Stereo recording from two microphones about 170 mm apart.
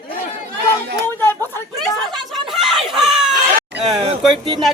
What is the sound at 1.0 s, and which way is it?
Chatter, 15° left (ahead or behind).